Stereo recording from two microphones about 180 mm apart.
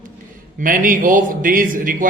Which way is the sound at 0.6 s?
50° right (ahead or behind).